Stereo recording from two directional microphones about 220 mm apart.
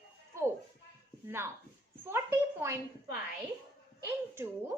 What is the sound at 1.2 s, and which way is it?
A woman's voice, 10° right (ahead or behind).